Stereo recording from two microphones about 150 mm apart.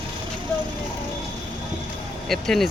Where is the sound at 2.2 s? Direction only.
Centre (ahead or behind).